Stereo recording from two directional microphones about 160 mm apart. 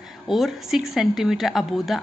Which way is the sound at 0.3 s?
Centre (ahead or behind).